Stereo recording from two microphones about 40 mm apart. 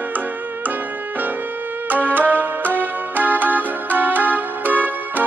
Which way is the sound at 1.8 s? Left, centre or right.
Right.